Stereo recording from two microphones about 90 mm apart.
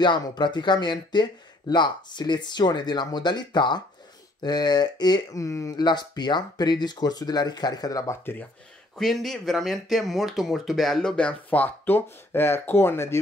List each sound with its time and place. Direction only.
0.0 s speech: 55° left (ahead or behind); by 5.8 s 35° left (ahead or behind)
5.8 s speech: 50° left (ahead or behind)
8.1 s speech: 25° left (ahead or behind)
8.9 s speech: 5° left (ahead or behind); by 13.2 s 30° left (ahead or behind)